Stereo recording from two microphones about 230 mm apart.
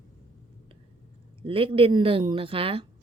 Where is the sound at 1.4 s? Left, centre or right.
Right.